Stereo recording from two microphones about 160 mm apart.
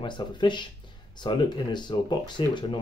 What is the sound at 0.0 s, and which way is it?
Speech, 30° left (ahead or behind).